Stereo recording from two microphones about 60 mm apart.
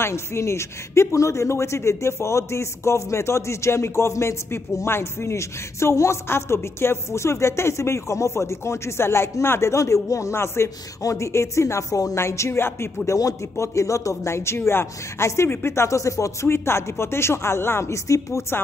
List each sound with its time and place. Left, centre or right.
0.0 s speech: left
11.0 s speech: left
16.4 s speech: left